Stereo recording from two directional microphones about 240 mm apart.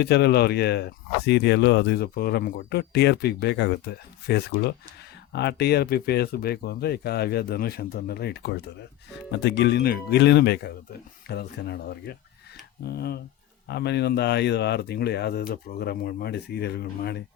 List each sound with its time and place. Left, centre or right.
0.0 s speech: left